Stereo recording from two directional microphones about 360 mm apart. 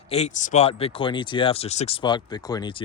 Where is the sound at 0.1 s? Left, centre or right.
Centre.